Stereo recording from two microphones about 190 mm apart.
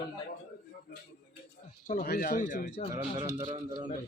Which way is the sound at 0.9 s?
55° left (ahead or behind).